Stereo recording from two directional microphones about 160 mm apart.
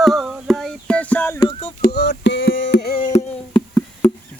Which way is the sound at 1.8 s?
90° left.